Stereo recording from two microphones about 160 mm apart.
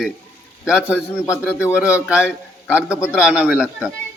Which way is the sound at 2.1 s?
5° right (ahead or behind).